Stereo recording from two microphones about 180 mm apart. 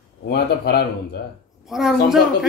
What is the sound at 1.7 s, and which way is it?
Speech, centre (ahead or behind).